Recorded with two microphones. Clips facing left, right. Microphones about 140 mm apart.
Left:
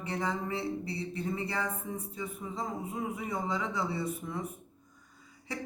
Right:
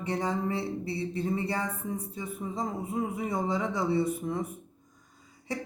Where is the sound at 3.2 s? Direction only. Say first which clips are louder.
Right 4 dB; 30° right (ahead or behind).